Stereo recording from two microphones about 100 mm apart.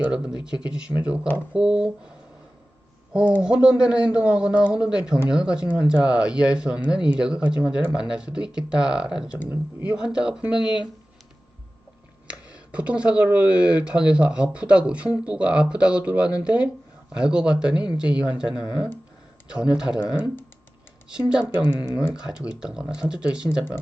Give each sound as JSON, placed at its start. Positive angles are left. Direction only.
{"t": 0.0, "sound": "speech", "side_deg": -10}
{"t": 3.1, "sound": "speech", "side_deg": -10}
{"t": 10.6, "sound": "speech", "side_deg": 50}
{"t": 12.3, "sound": "speech", "side_deg": -10}
{"t": 21.1, "sound": "speech", "side_deg": -10}